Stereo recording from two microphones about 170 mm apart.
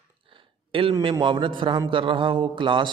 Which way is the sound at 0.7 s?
30° right (ahead or behind).